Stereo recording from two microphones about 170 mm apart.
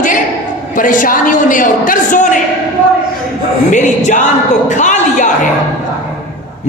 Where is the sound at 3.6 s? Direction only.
45° left (ahead or behind).